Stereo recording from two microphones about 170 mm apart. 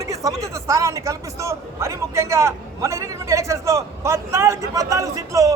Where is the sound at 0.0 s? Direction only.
20° right (ahead or behind).